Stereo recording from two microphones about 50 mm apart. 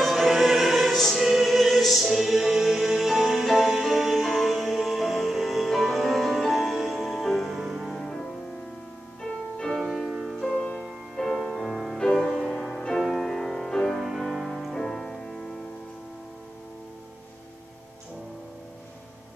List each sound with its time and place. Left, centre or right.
0.0 s music: centre
9.2 s music: centre
9.8 s music: centre
10.4 s music: left
10.8 s music: centre
12.0 s music: centre
14.7 s music: centre